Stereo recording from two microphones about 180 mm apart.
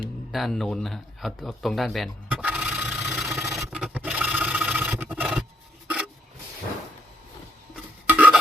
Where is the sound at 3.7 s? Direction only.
5° right (ahead or behind).